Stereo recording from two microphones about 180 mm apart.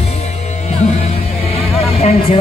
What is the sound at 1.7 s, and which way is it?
Music, 35° left (ahead or behind).